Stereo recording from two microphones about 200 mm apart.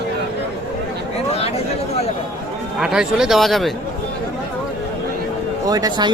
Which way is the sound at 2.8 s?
5° right (ahead or behind).